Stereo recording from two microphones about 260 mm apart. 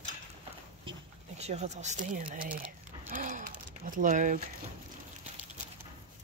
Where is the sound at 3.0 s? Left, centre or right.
Right.